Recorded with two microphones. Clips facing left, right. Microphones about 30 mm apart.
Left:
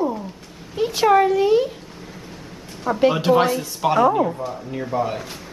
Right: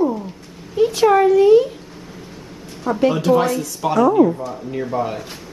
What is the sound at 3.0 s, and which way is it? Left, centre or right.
Speech, centre.